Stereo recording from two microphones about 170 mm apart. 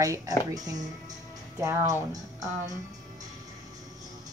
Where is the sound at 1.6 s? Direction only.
20° right (ahead or behind).